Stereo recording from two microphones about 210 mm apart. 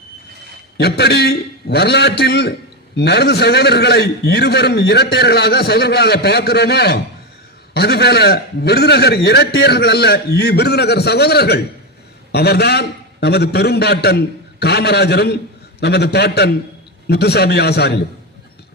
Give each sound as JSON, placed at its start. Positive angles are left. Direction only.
{"t": 0.8, "sound": "a man's voice", "side_deg": 50}